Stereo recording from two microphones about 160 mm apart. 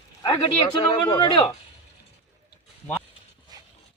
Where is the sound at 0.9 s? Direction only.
30° left (ahead or behind).